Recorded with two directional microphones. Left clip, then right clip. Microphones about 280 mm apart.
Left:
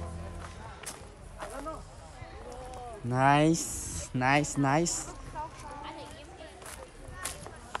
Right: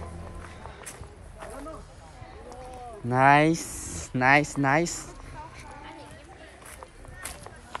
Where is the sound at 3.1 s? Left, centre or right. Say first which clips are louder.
Right 5 dB; centre.